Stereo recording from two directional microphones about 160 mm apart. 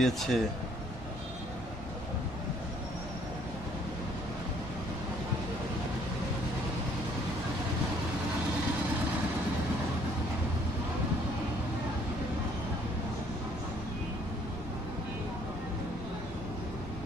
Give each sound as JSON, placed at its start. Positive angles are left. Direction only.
{"t": 0.0, "sound": "speech", "side_deg": 0}